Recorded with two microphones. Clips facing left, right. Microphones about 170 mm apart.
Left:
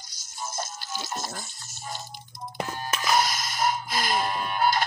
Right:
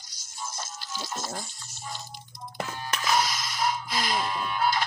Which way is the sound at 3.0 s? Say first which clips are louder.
Left 2 dB; 45° left (ahead or behind).